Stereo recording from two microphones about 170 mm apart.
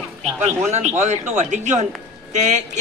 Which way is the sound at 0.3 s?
15° right (ahead or behind).